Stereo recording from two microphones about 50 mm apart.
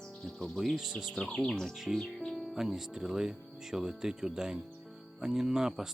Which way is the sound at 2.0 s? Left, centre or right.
Centre.